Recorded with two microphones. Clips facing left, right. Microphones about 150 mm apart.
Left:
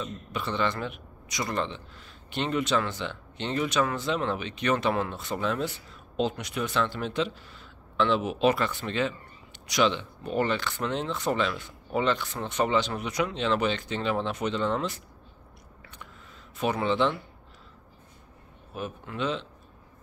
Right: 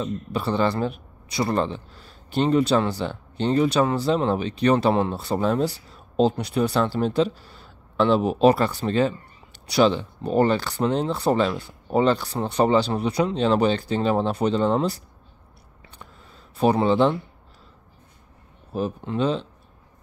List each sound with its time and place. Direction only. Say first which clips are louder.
0.0 s a man's voice: right 7 dB; 35° right (ahead or behind)
16.5 s a man's voice: right 7 dB; 35° right (ahead or behind)
18.7 s a man's voice: right 9 dB; 35° right (ahead or behind)